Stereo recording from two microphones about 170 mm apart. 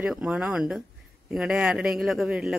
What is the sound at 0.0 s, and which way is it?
Speech, 5° right (ahead or behind).